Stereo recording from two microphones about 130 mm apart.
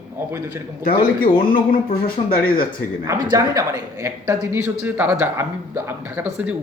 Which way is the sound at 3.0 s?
25° right (ahead or behind).